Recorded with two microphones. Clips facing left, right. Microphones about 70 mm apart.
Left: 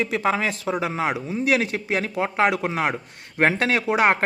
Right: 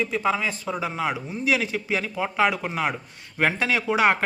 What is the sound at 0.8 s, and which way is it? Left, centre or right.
Speech, left.